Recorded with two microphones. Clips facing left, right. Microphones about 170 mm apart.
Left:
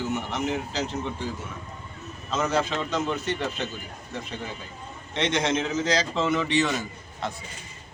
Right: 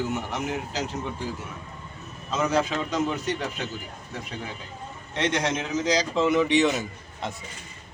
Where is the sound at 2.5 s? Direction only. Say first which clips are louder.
Right 1 dB; 10° right (ahead or behind).